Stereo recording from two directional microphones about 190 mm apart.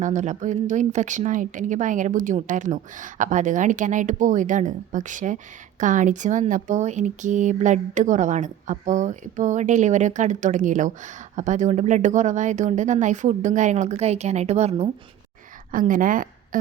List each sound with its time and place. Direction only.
0.0 s a woman's voice: 40° right (ahead or behind)
15.7 s a woman's voice: 45° right (ahead or behind)